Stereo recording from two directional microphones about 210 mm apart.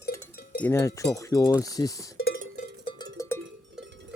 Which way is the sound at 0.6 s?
10° left (ahead or behind).